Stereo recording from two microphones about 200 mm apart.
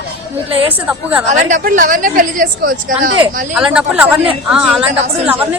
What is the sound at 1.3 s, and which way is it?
Speech, 40° right (ahead or behind).